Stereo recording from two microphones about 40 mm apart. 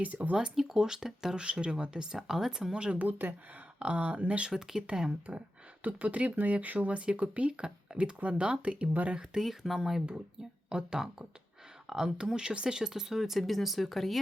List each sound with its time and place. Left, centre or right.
0.0 s speech: right
0.5 s speech: centre
3.1 s speech: right
3.8 s speech: right
4.5 s speech: centre
5.8 s speech: right
9.4 s speech: centre
13.4 s speech: centre